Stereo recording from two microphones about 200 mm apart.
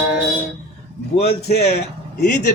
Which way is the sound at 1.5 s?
50° left (ahead or behind).